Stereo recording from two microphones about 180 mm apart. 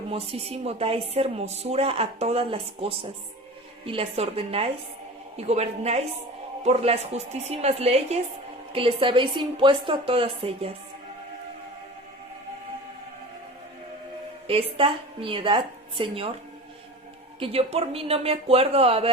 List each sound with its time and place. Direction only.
0.1 s a woman's voice: 30° right (ahead or behind)
14.4 s a woman's voice: 30° right (ahead or behind)
17.4 s speech: 35° right (ahead or behind)